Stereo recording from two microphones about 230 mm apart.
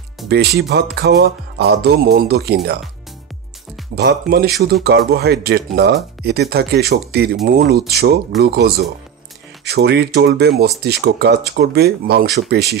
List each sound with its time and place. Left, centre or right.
0.3 s speech: right
3.9 s speech: right